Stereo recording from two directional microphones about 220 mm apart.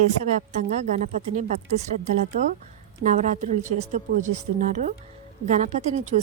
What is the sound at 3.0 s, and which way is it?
A woman's voice, 35° right (ahead or behind).